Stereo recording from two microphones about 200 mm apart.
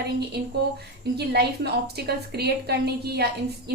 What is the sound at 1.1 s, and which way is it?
A woman's voice, 55° right (ahead or behind).